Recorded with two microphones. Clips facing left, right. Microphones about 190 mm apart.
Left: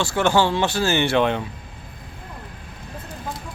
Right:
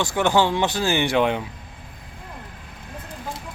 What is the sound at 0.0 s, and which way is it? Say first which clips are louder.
Speech: left 1 dB; 15° right (ahead or behind).